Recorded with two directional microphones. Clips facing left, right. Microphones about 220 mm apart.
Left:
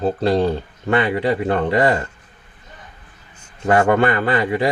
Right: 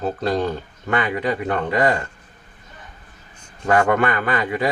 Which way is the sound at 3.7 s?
30° left (ahead or behind).